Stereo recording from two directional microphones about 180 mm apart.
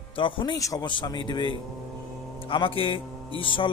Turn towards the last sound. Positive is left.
turn(degrees=30)  # may be behind; listen again after turning